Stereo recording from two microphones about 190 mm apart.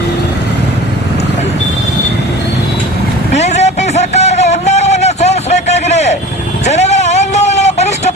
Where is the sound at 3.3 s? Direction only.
35° left (ahead or behind).